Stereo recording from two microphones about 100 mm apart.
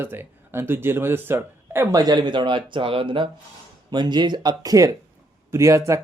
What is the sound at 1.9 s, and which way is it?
Speech, 40° right (ahead or behind).